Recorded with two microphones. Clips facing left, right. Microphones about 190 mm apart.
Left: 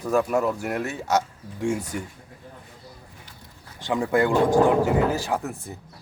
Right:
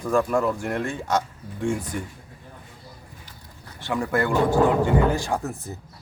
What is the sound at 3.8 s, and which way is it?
Speech, 15° left (ahead or behind).